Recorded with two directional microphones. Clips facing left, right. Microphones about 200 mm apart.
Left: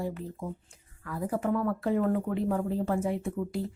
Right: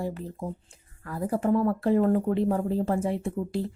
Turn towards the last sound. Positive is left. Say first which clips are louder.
# right 2 dB
turn(degrees=-35)  # may be behind; listen again after turning